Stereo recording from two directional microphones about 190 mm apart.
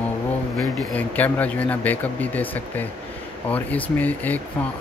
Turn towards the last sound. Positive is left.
turn(degrees=10)  # may be behind; listen again after turning